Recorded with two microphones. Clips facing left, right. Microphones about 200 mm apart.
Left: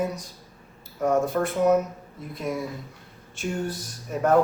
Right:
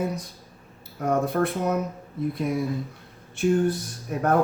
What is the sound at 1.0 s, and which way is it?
Speech, 60° right (ahead or behind).